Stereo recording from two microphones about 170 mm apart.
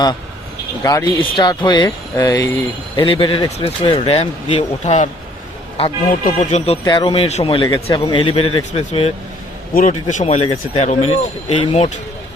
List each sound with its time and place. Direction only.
0.8 s speech: 20° left (ahead or behind); by 5.0 s 40° left (ahead or behind)
6.2 s speech: 40° left (ahead or behind)
6.8 s speech: 30° left (ahead or behind)